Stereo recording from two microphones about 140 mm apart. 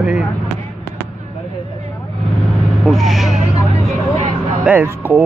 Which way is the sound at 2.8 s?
Centre (ahead or behind).